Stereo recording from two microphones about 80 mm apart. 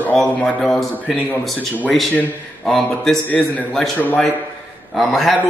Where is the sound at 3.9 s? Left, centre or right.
Centre.